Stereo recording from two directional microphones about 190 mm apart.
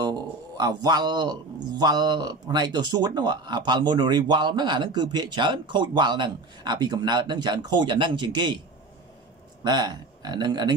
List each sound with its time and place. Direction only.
0.6 s speech: 20° right (ahead or behind)
9.6 s speech: 20° right (ahead or behind)